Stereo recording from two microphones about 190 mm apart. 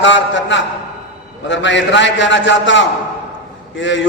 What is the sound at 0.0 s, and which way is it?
A man's voice, 75° left (ahead or behind).